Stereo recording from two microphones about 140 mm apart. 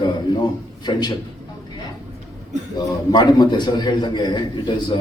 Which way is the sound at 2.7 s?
30° left (ahead or behind).